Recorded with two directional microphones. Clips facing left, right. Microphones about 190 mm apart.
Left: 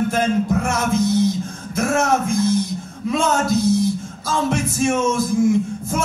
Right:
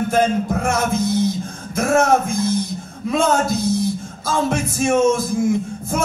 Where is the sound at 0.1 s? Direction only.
50° right (ahead or behind).